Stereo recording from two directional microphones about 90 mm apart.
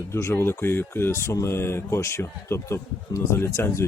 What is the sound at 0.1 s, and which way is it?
Speech, 30° left (ahead or behind).